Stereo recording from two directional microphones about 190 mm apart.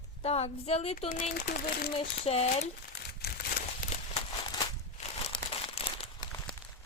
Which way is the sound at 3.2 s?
55° left (ahead or behind).